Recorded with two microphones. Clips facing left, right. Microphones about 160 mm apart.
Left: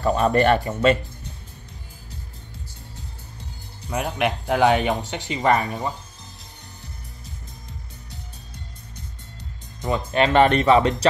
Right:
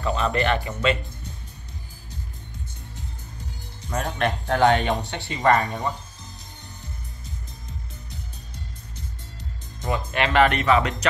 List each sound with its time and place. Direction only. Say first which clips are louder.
0.0 s speech: left 5 dB; 45° left (ahead or behind)
3.9 s speech: left 2 dB; 10° left (ahead or behind)
10.1 s speech: left 3 dB; 30° left (ahead or behind)